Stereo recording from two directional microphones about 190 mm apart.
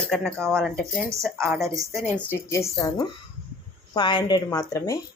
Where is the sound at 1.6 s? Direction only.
15° right (ahead or behind).